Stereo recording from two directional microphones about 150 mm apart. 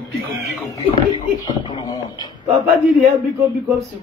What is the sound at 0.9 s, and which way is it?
Speech, 30° left (ahead or behind).